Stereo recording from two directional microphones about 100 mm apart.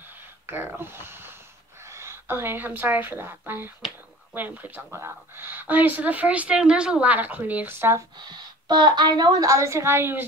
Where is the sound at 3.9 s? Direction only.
20° right (ahead or behind).